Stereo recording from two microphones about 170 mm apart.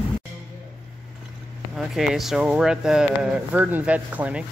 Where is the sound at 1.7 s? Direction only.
5° right (ahead or behind).